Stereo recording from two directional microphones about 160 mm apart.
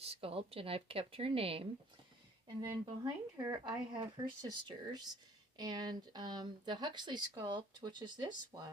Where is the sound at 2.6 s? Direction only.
25° right (ahead or behind).